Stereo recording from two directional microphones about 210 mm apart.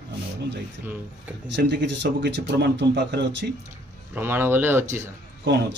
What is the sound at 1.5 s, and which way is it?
Speech, 60° right (ahead or behind).